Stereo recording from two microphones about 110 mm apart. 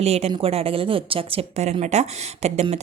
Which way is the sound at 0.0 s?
70° right (ahead or behind).